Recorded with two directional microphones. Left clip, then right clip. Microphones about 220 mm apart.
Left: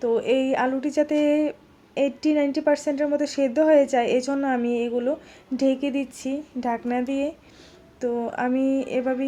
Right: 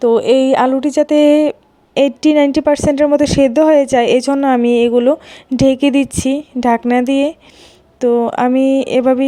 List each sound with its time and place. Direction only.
0.0 s speech: 35° right (ahead or behind)